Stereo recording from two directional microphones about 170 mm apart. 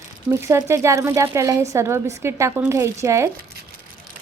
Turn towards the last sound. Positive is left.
turn(degrees=-15)  # may be behind; listen again after turning